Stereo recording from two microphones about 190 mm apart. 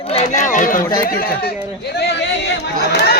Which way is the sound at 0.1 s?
35° left (ahead or behind).